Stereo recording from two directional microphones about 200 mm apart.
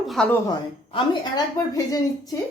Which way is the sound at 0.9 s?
20° left (ahead or behind).